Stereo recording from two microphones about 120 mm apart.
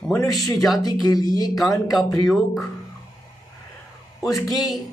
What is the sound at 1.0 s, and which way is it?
Speech, 35° left (ahead or behind).